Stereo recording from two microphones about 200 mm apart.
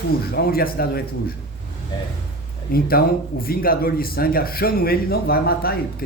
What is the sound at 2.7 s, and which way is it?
A man's voice, 50° left (ahead or behind).